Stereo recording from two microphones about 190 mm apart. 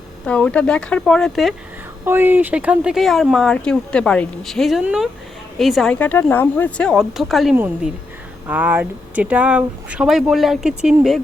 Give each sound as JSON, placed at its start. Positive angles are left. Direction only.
{"t": 0.3, "sound": "speech", "side_deg": 5}
{"t": 2.0, "sound": "speech", "side_deg": -10}